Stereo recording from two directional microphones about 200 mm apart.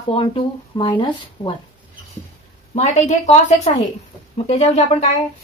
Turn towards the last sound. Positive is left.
turn(degrees=35)  # may be behind; listen again after turning